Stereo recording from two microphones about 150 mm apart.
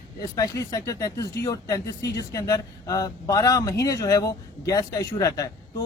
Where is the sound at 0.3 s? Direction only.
25° left (ahead or behind).